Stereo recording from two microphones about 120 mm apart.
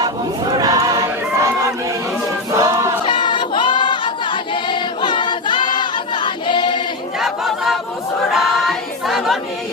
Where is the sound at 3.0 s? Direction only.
40° left (ahead or behind).